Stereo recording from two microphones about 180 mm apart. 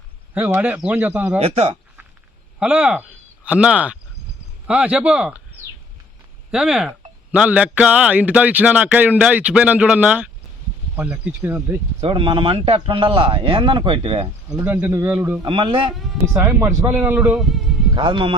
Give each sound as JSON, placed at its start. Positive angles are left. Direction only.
{"t": 0.3, "sound": "speech", "side_deg": -10}
{"t": 1.4, "sound": "speech", "side_deg": -35}
{"t": 2.6, "sound": "speech", "side_deg": -5}
{"t": 6.5, "sound": "speech", "side_deg": -5}
{"t": 11.9, "sound": "speech", "side_deg": -30}
{"t": 14.6, "sound": "speech", "side_deg": -10}
{"t": 15.4, "sound": "speech", "side_deg": -25}
{"t": 16.3, "sound": "speech", "side_deg": -15}
{"t": 17.3, "sound": "speech", "side_deg": 0}
{"t": 17.9, "sound": "speech", "side_deg": -25}